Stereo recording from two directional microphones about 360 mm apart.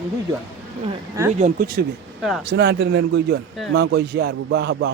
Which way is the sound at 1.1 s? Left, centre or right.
Centre.